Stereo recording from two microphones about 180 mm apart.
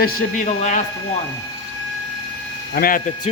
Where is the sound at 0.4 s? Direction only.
45° left (ahead or behind).